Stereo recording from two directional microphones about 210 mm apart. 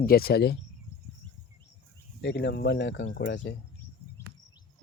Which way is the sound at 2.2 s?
55° left (ahead or behind).